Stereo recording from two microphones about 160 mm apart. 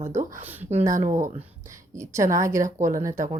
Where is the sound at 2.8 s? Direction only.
55° right (ahead or behind).